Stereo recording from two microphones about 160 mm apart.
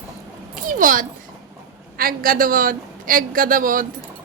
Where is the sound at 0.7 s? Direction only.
60° right (ahead or behind).